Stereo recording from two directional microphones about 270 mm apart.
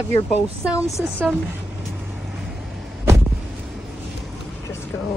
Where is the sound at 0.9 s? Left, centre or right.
Centre.